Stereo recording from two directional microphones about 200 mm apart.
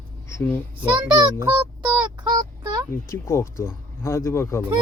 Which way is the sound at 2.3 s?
20° right (ahead or behind).